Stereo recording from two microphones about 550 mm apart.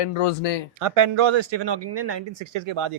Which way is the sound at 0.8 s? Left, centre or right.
Right.